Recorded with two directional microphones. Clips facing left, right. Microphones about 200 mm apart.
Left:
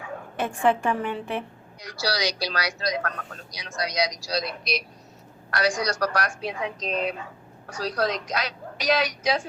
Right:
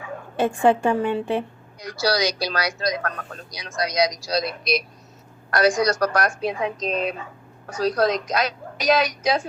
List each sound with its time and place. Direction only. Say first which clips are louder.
0.3 s a woman's voice: right 5 dB; 30° right (ahead or behind)
1.8 s a woman's voice: right 5 dB; 50° right (ahead or behind)